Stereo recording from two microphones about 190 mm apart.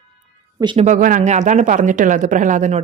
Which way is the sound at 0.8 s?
40° right (ahead or behind).